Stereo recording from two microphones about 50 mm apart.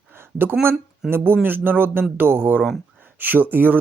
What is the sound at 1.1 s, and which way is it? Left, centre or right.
Speech, right.